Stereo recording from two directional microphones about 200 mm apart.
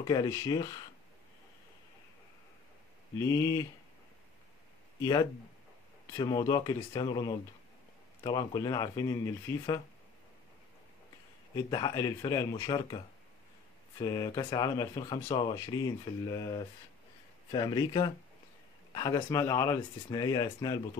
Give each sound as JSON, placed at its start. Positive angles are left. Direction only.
{"t": 0.0, "sound": "speech", "side_deg": 20}
{"t": 3.2, "sound": "speech", "side_deg": 15}
{"t": 6.1, "sound": "speech", "side_deg": 20}
{"t": 11.5, "sound": "speech", "side_deg": 20}